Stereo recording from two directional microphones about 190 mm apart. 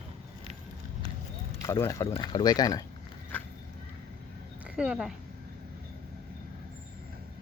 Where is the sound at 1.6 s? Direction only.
15° left (ahead or behind).